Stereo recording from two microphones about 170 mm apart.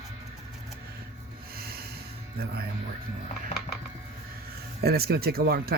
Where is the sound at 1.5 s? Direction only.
65° right (ahead or behind).